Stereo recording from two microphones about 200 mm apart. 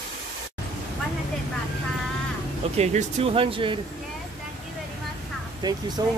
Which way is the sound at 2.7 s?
30° right (ahead or behind).